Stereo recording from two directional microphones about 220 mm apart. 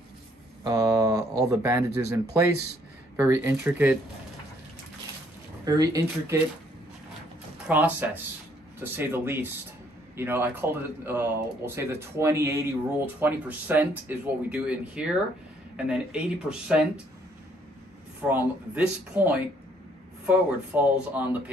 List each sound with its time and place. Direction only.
0.7 s a sound: 15° right (ahead or behind)
1.5 s speech: 15° right (ahead or behind)
5.7 s speech: 15° right (ahead or behind)
7.6 s speech: 5° right (ahead or behind)
18.3 s speech: 10° right (ahead or behind)